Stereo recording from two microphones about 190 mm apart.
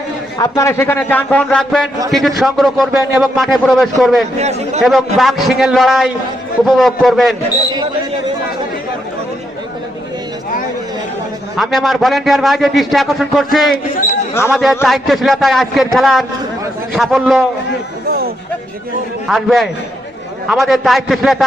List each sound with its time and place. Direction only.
0.3 s a man's voice: 15° left (ahead or behind); by 4.2 s centre (ahead or behind)
4.4 s a man's voice: 35° right (ahead or behind)
4.8 s a man's voice: centre (ahead or behind)
11.5 s a man's voice: centre (ahead or behind)
19.3 s a man's voice: centre (ahead or behind)